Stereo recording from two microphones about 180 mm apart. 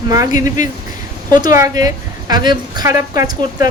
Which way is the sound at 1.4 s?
20° right (ahead or behind).